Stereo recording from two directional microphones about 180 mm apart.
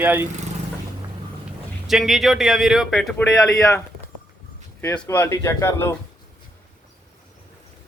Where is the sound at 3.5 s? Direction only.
20° left (ahead or behind).